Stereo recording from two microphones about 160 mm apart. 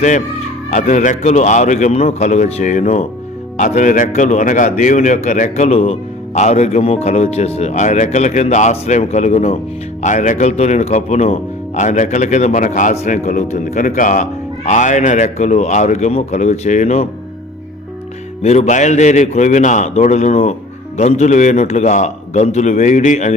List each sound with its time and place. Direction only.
0.7 s a man's voice: 50° left (ahead or behind)
18.4 s a man's voice: 45° left (ahead or behind)